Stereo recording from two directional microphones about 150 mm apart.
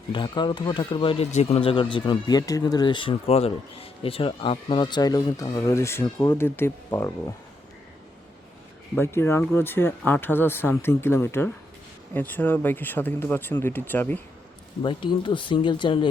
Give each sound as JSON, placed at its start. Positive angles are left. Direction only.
{"t": 0.1, "sound": "speech", "side_deg": 30}
{"t": 9.0, "sound": "speech", "side_deg": 15}
{"t": 14.8, "sound": "speech", "side_deg": 30}